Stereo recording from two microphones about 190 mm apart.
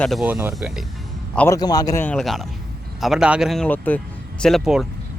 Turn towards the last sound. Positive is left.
turn(degrees=0)  # may be behind; listen again after turning